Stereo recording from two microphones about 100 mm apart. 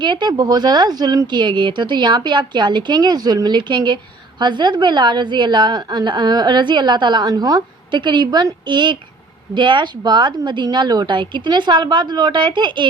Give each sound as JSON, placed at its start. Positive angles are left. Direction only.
{"t": 0.0, "sound": "a woman's voice", "side_deg": -50}